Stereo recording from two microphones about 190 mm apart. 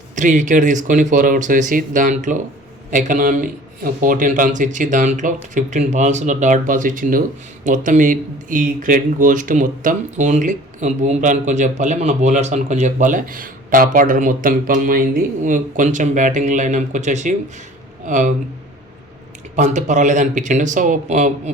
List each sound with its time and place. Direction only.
0.2 s a man's voice: 40° right (ahead or behind)
19.5 s a man's voice: 40° right (ahead or behind)